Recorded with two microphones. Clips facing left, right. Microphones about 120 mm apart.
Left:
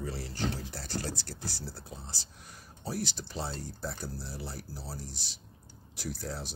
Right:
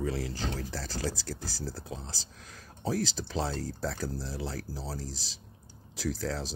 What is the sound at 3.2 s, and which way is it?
Speech, 90° right.